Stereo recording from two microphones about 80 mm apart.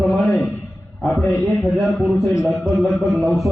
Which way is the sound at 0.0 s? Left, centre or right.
Centre.